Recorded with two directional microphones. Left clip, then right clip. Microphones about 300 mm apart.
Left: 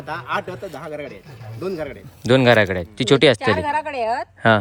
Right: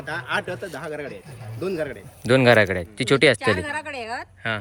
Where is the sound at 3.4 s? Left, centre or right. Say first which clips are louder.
Left 4 dB; left.